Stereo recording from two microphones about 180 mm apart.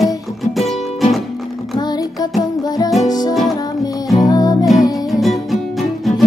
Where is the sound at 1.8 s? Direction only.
20° left (ahead or behind).